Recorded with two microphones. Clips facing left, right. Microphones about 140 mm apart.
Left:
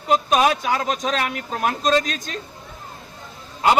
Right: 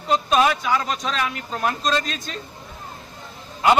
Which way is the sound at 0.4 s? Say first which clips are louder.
Even; 45° left (ahead or behind).